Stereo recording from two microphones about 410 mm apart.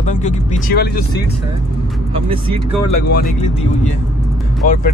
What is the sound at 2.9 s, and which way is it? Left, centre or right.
Speech, left.